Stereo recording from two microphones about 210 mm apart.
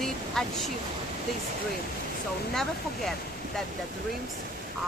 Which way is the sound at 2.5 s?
Centre (ahead or behind).